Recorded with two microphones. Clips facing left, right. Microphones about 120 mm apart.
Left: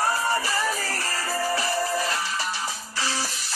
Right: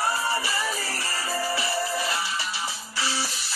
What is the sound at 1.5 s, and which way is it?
Music, centre (ahead or behind).